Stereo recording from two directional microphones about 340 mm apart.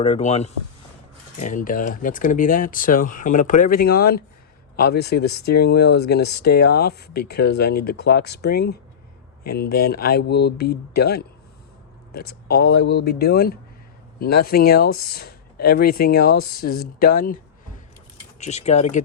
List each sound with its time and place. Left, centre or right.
0.0 s speech: centre
12.3 s speech: left